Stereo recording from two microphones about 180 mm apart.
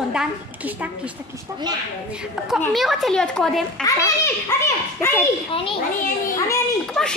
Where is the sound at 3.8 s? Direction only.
20° left (ahead or behind).